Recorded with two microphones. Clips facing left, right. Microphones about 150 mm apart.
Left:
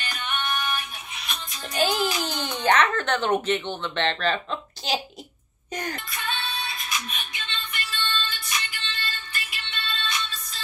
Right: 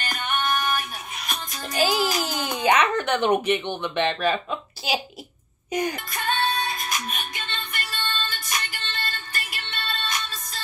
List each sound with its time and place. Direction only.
0.0 s music: 45° right (ahead or behind)
1.8 s music: 5° right (ahead or behind)
2.2 s a sound: 10° right (ahead or behind)
2.6 s speech: 10° right (ahead or behind)
6.0 s music: 45° right (ahead or behind)